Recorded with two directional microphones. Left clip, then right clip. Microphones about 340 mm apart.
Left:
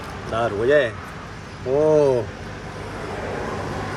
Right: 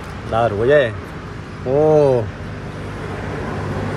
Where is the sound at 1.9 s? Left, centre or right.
Left.